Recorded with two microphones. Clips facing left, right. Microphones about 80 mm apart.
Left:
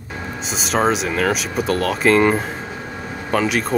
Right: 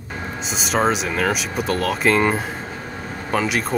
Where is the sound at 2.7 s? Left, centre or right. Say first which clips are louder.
Left 1 dB; left.